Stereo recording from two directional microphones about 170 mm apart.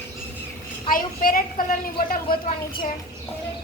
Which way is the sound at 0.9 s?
55° left (ahead or behind).